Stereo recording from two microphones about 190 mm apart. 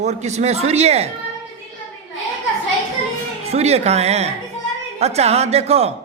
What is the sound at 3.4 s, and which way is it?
Speech, 35° right (ahead or behind).